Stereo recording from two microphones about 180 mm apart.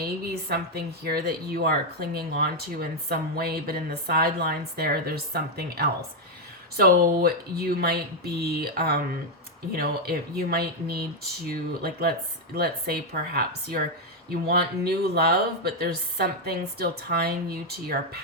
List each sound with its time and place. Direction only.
0.0 s speech: 60° right (ahead or behind)